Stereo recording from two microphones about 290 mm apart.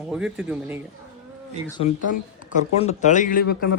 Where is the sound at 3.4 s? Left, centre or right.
Left.